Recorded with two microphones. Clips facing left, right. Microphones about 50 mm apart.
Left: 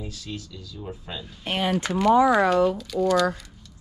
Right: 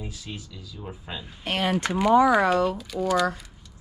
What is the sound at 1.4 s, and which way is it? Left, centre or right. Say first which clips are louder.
Speech: even; right.